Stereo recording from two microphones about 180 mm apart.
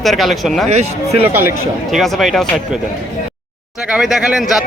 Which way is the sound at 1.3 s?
10° right (ahead or behind).